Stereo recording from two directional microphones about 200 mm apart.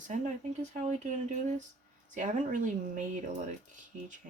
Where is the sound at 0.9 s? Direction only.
35° right (ahead or behind).